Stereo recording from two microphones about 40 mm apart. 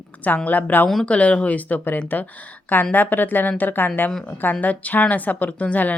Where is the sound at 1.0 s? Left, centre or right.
Left.